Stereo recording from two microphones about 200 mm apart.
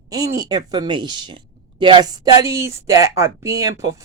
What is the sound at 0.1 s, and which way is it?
A woman's voice, 15° right (ahead or behind).